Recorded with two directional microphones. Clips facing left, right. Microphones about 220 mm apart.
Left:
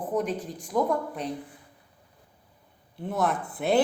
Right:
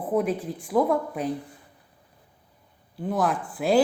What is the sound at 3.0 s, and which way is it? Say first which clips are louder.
Speech: right 2 dB; centre (ahead or behind).